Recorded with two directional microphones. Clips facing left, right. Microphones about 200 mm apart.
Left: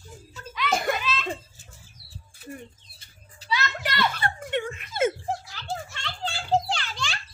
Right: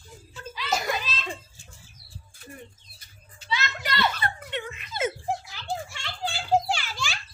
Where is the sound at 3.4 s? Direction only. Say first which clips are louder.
Left 2 dB; 35° left (ahead or behind).